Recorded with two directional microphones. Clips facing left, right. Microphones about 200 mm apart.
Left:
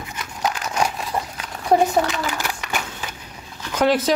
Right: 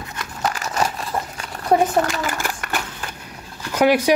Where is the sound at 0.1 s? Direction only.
5° left (ahead or behind).